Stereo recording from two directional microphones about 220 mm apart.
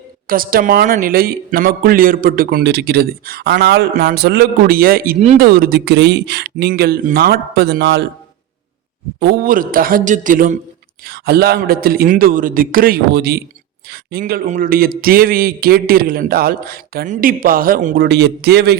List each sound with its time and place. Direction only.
0.3 s a man's voice: 40° right (ahead or behind)
9.2 s a man's voice: 45° right (ahead or behind)